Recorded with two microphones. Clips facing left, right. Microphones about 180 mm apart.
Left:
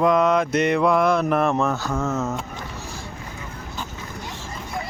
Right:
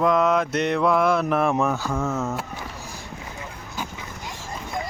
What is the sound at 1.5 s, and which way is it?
Speech, 10° right (ahead or behind).